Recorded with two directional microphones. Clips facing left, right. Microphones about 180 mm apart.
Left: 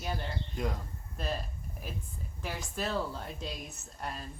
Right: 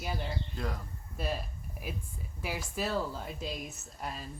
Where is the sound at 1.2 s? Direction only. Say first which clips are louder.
Right 1 dB; 10° right (ahead or behind).